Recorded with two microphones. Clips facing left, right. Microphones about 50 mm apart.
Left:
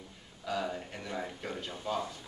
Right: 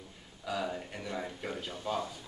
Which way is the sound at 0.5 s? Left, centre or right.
Centre.